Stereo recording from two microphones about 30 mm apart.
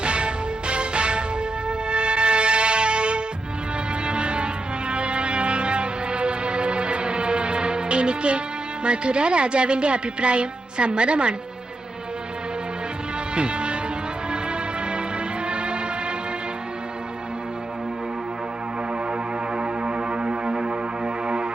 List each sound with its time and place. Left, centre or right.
0.0 s music: right
8.8 s a woman's voice: right
13.3 s music: right
15.4 s music: right
19.5 s music: right